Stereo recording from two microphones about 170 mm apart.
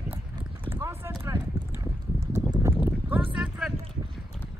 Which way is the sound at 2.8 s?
10° right (ahead or behind).